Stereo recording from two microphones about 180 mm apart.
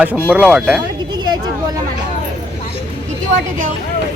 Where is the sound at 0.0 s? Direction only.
10° right (ahead or behind).